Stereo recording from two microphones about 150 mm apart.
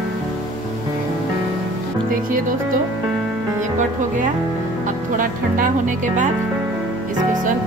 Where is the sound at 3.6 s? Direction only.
60° right (ahead or behind).